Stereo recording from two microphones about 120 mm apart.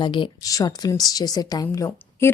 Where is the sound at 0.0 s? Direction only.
45° left (ahead or behind).